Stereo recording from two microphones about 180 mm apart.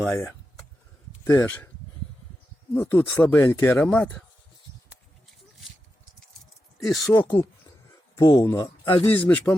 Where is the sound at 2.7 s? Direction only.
10° left (ahead or behind).